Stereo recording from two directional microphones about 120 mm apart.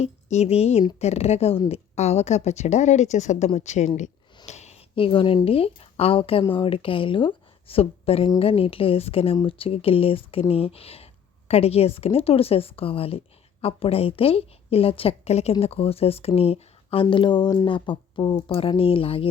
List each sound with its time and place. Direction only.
0.0 s a woman's voice: 65° left (ahead or behind)
4.4 s a sound: 70° left (ahead or behind)
4.9 s a woman's voice: 50° left (ahead or behind)